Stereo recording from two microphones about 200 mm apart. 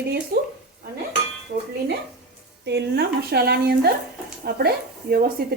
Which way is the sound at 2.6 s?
55° right (ahead or behind).